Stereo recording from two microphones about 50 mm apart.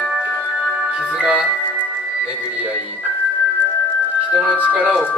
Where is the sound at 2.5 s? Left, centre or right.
Right.